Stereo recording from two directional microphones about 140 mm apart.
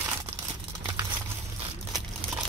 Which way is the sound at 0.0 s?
15° right (ahead or behind).